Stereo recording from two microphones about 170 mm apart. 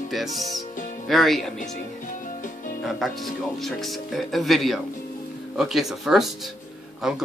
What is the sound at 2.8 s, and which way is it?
Speech, centre (ahead or behind).